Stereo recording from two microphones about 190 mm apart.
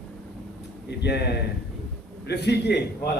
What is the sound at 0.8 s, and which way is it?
A man's voice, 60° left (ahead or behind).